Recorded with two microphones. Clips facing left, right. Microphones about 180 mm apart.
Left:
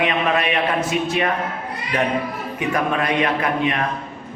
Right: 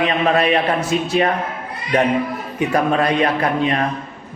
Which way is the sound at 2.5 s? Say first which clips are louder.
Right 4 dB; 35° right (ahead or behind).